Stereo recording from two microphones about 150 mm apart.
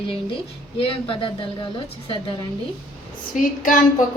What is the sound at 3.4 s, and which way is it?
Speech, 65° left (ahead or behind).